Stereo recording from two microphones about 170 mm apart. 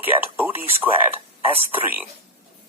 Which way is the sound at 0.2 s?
10° right (ahead or behind).